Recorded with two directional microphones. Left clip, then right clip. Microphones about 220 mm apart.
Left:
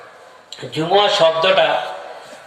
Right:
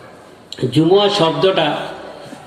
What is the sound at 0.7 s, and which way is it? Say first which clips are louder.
Speech: right 2 dB; 35° right (ahead or behind).